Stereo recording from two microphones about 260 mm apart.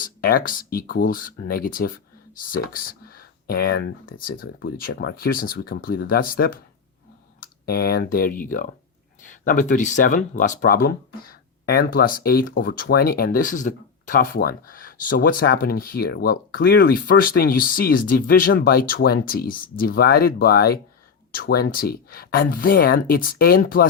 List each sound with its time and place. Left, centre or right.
0.0 s speech: left
3.4 s speech: left